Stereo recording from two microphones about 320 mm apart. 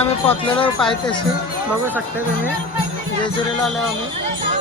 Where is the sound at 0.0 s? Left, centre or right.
Centre.